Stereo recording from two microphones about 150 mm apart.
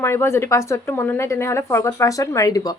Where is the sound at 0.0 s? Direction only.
15° left (ahead or behind).